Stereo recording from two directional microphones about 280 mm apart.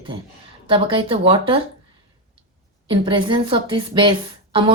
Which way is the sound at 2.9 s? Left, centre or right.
Centre.